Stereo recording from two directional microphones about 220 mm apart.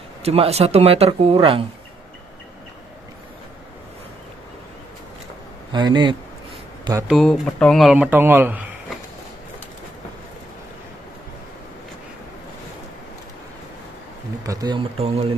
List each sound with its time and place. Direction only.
0.2 s speech: 30° right (ahead or behind)
5.7 s speech: 20° right (ahead or behind)
6.8 s a sound: 15° right (ahead or behind)
7.1 s speech: centre (ahead or behind)
14.4 s speech: 15° right (ahead or behind)